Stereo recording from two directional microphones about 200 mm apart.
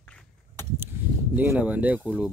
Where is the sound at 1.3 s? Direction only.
10° right (ahead or behind).